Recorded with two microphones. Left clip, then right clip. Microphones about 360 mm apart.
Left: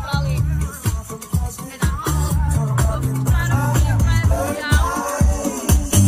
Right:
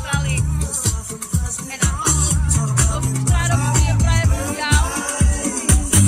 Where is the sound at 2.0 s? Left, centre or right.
Centre.